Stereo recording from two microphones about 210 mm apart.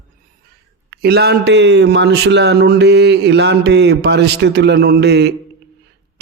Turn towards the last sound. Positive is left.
turn(degrees=-55)  # may be behind; listen again after turning